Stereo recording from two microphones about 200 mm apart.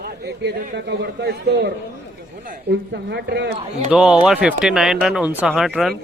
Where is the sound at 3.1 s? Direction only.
55° right (ahead or behind).